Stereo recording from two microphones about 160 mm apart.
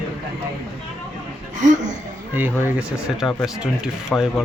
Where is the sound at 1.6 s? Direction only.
50° right (ahead or behind).